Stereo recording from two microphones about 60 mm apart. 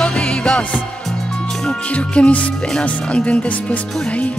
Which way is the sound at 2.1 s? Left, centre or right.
Centre.